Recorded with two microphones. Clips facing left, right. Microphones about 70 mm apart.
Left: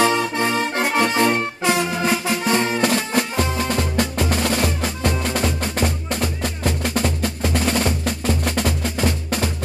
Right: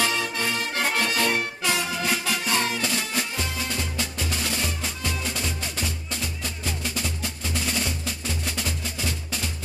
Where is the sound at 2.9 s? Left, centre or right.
Left.